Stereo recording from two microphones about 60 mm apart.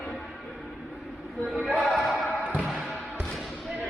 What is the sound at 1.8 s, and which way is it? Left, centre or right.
Choir, centre.